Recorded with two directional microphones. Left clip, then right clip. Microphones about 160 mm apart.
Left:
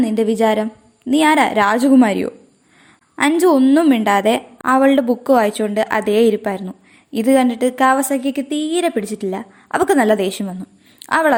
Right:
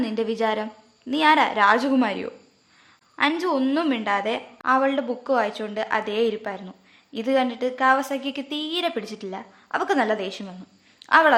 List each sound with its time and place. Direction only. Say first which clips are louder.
0.0 s a woman's voice: left 8 dB; 30° left (ahead or behind)